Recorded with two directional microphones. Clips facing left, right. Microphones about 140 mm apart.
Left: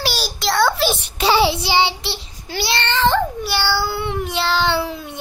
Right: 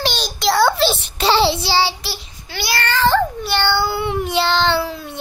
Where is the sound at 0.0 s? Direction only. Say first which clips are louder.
Right 3 dB; 5° left (ahead or behind).